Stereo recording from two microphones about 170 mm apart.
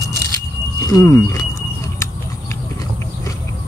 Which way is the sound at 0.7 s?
20° left (ahead or behind).